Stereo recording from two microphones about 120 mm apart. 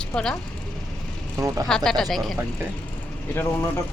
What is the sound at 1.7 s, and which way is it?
Speech, 5° left (ahead or behind).